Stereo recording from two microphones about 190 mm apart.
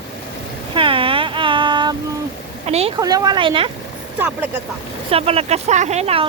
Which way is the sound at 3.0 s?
20° right (ahead or behind).